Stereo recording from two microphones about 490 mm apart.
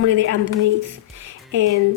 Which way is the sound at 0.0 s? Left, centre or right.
Right.